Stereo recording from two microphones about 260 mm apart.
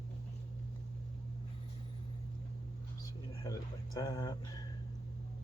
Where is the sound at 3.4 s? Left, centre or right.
Centre.